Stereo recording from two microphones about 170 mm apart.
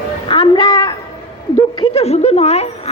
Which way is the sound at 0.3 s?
30° left (ahead or behind).